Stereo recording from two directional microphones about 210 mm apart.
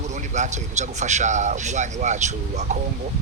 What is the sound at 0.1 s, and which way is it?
A man's voice, 35° right (ahead or behind).